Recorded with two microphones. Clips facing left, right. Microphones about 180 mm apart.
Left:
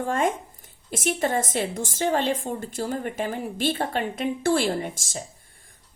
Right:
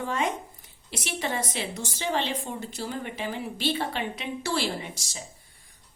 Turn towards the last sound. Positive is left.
turn(degrees=50)  # may be behind; listen again after turning